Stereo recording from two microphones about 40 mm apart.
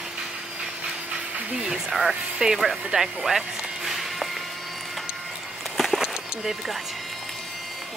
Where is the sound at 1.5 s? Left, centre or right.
Centre.